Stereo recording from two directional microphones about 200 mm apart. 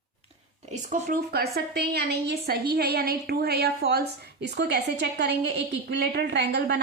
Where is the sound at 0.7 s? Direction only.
35° right (ahead or behind).